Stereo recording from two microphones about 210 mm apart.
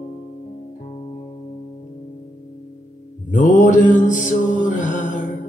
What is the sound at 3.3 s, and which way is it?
Mantra, 40° left (ahead or behind).